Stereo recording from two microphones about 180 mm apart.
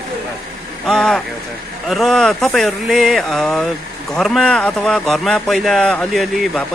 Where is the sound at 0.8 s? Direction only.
5° left (ahead or behind).